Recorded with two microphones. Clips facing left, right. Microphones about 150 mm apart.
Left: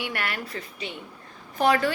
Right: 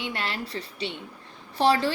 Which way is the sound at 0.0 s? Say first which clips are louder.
Even; 25° right (ahead or behind).